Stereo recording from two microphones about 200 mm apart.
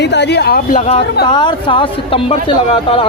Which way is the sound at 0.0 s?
60° left (ahead or behind).